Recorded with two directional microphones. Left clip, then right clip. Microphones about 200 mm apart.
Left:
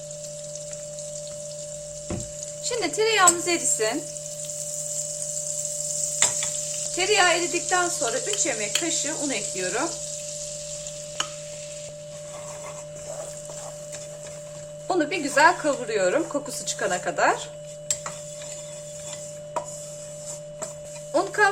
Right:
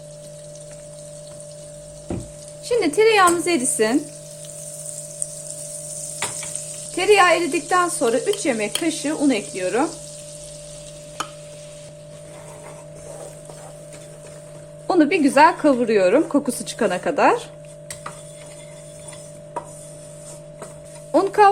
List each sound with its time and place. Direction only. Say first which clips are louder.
2.6 s speech: right 7 dB; 35° right (ahead or behind)
6.9 s speech: right 6 dB; 45° right (ahead or behind)
14.8 s speech: right 8 dB; 35° right (ahead or behind)
21.1 s a sound: right 7 dB; 35° right (ahead or behind)